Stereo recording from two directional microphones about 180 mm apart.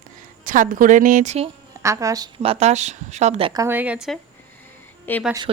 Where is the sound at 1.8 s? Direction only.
15° right (ahead or behind); by 3.5 s 35° right (ahead or behind).